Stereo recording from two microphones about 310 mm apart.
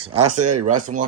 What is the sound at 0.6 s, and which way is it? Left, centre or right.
Speech, right.